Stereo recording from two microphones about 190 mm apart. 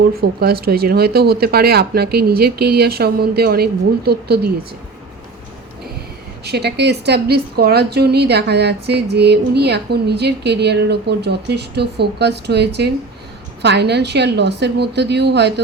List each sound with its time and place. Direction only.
0.1 s a woman's voice: 55° right (ahead or behind)
6.4 s a woman's voice: 60° right (ahead or behind)